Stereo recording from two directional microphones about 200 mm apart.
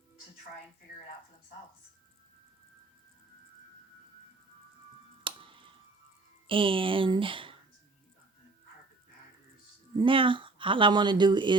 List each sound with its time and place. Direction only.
5.2 s finger snapping: 25° right (ahead or behind)
6.5 s speech: 25° right (ahead or behind)
9.9 s speech: 25° right (ahead or behind)